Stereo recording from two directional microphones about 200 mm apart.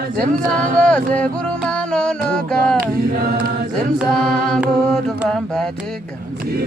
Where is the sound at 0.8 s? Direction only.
5° left (ahead or behind).